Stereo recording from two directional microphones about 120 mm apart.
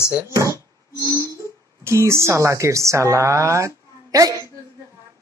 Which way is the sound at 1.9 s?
25° right (ahead or behind).